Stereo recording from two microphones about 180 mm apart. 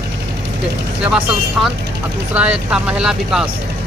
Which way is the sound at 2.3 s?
5° right (ahead or behind).